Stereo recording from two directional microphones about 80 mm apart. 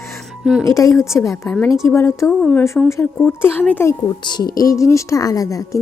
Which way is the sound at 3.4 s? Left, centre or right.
Left.